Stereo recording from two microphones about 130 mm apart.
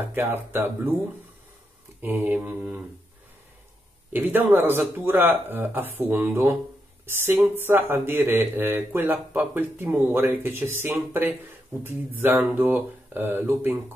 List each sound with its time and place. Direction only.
0.1 s speech: 15° right (ahead or behind)
2.0 s speech: 15° right (ahead or behind)
4.1 s speech: 15° right (ahead or behind)